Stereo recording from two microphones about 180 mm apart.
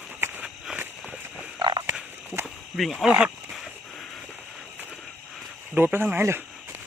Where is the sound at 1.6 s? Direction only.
25° right (ahead or behind).